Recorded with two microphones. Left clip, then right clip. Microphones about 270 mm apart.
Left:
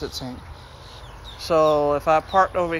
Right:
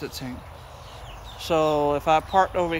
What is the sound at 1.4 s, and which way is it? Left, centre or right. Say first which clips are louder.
Speech: left 4 dB; centre.